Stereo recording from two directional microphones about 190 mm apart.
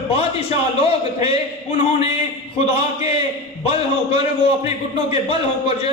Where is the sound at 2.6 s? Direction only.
30° left (ahead or behind).